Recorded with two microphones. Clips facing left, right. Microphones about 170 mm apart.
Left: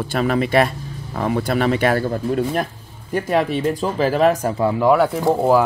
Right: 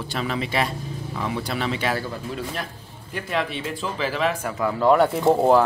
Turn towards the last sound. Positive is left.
turn(degrees=0)  # may be behind; listen again after turning